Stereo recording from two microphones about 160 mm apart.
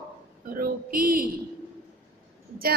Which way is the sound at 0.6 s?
65° right (ahead or behind).